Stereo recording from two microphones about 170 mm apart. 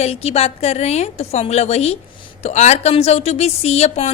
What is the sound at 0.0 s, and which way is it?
A man's voice, 35° left (ahead or behind).